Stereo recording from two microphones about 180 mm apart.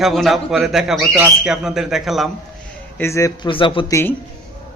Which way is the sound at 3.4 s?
30° left (ahead or behind).